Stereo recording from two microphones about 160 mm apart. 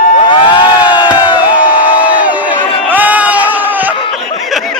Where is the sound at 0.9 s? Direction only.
25° left (ahead or behind).